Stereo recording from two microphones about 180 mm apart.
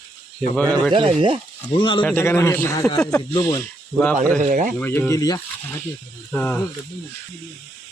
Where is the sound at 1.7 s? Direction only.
25° left (ahead or behind).